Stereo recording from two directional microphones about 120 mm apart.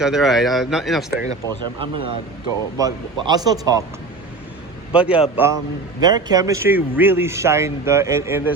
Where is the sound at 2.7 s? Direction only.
30° right (ahead or behind).